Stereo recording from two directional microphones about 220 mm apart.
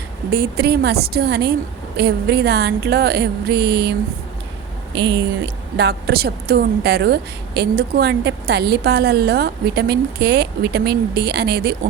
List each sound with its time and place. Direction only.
0.3 s a woman's voice: 45° right (ahead or behind)
5.7 s a woman's voice: 45° right (ahead or behind)